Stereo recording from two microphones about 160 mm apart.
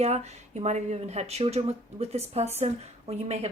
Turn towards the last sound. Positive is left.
turn(degrees=-40)  # may be behind; listen again after turning